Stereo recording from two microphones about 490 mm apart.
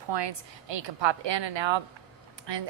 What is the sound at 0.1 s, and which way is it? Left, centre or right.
A woman's voice, right.